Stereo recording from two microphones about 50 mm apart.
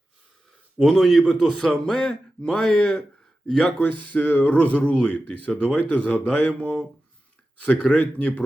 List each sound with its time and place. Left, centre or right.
0.8 s a man's voice: centre
4.2 s speech: left